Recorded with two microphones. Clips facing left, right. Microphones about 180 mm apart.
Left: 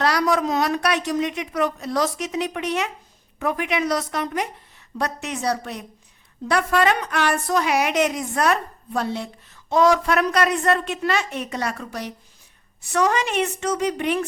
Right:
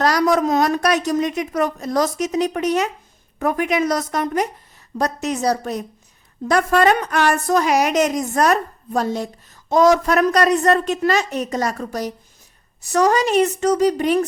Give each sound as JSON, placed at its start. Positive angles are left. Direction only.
{"t": 0.0, "sound": "a woman's voice", "side_deg": -45}